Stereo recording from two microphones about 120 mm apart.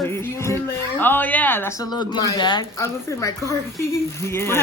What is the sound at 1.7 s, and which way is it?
Speech, 35° left (ahead or behind).